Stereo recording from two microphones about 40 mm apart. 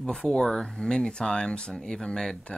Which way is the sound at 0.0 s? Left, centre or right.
Centre.